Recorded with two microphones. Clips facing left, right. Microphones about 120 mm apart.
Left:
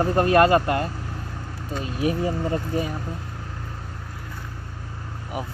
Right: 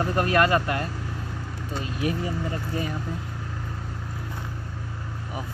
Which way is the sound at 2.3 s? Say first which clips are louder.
Left 5 dB; 15° left (ahead or behind).